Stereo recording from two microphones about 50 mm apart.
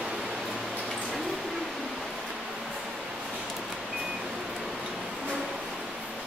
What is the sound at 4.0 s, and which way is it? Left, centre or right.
Vehicle, centre.